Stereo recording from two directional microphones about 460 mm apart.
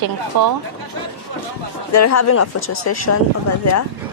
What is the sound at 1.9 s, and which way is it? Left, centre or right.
Speech, left.